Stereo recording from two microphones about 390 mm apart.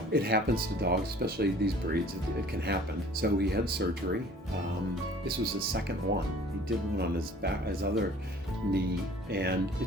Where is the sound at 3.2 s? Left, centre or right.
Right.